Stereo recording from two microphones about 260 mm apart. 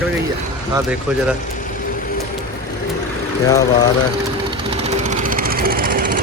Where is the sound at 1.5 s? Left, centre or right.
Left.